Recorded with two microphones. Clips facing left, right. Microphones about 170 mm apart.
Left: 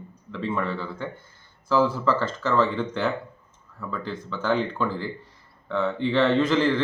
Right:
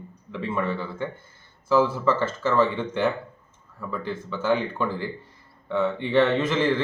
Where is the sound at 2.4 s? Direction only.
10° right (ahead or behind).